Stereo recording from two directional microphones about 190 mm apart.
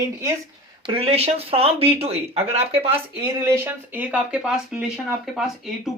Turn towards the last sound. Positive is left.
turn(degrees=0)  # may be behind; listen again after turning